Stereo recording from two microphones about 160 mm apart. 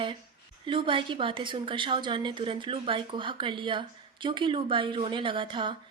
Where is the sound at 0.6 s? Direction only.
30° right (ahead or behind).